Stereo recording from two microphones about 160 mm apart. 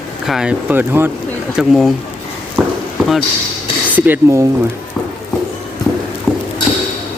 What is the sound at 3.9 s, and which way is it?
Speech, 10° right (ahead or behind).